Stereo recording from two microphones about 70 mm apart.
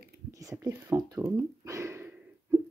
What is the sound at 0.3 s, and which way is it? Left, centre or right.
Whispering, right.